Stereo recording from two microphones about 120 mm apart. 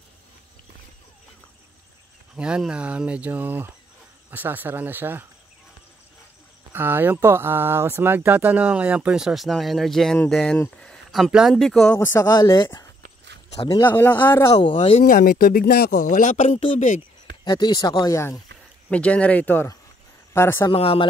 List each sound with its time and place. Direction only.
2.3 s speech: 5° right (ahead or behind)
6.7 s speech: 15° right (ahead or behind); by 11.9 s 5° left (ahead or behind)
11.9 s speech: 15° left (ahead or behind)
12.3 s speech: 30° left (ahead or behind)
13.7 s speech: 15° left (ahead or behind)
14.5 s speech: 45° left (ahead or behind)
15.9 s speech: 90° left
17.5 s speech: 35° left (ahead or behind)
18.9 s speech: 10° left (ahead or behind)
20.7 s speech: 50° left (ahead or behind)